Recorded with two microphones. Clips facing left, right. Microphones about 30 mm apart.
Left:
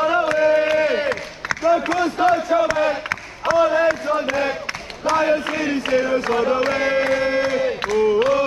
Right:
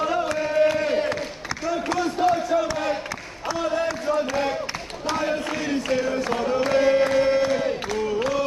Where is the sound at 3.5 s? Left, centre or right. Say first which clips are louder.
Left 8 dB; left.